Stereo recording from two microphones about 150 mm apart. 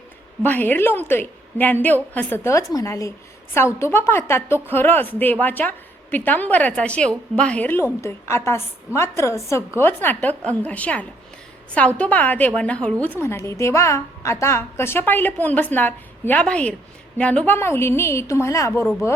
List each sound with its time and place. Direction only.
0.4 s a woman's voice: 10° left (ahead or behind)